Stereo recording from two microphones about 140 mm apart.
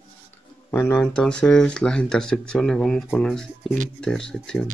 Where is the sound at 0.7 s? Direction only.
15° left (ahead or behind).